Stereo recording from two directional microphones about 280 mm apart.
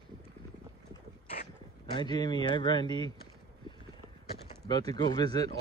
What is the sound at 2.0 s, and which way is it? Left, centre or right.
Speech, centre.